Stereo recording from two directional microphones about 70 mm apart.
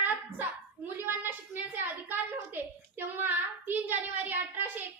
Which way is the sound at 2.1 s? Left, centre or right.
Right.